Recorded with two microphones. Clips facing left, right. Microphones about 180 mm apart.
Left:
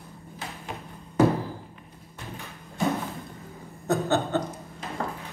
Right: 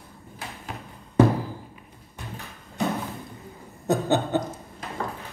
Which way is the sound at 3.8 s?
15° right (ahead or behind).